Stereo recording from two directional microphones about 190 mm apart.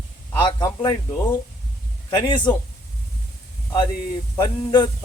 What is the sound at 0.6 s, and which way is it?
Speech, 20° left (ahead or behind).